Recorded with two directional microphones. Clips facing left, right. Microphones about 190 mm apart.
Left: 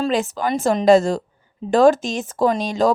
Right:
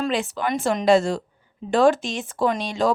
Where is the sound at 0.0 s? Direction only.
40° left (ahead or behind).